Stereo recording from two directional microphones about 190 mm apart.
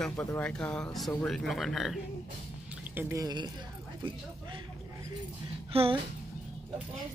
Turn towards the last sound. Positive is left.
turn(degrees=-30)  # may be behind; listen again after turning